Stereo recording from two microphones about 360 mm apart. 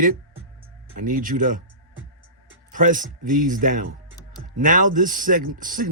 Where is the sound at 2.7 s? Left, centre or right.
Right.